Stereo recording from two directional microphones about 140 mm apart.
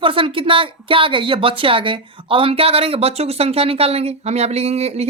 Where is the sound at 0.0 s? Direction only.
40° right (ahead or behind).